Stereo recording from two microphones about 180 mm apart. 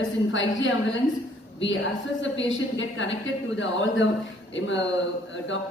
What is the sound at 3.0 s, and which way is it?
A woman's voice, 90° left.